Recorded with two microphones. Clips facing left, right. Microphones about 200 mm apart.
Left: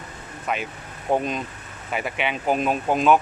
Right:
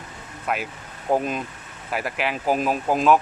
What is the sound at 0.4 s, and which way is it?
Speech, 5° right (ahead or behind).